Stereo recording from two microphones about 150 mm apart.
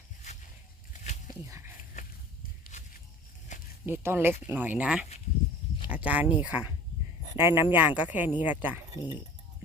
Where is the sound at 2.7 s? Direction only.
50° left (ahead or behind).